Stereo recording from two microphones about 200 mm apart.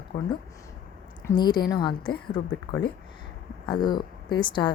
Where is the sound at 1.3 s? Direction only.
20° left (ahead or behind).